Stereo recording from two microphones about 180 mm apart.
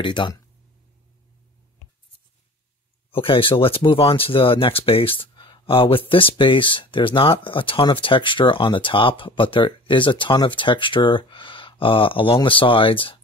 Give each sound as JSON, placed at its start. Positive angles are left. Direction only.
{"t": 0.0, "sound": "speech", "side_deg": 25}
{"t": 3.1, "sound": "speech", "side_deg": 30}